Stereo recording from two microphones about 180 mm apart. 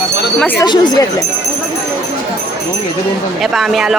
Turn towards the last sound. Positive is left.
turn(degrees=0)  # may be behind; listen again after turning